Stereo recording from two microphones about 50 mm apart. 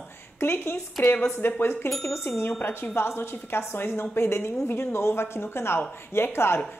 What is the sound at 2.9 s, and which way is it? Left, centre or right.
A woman's voice, left.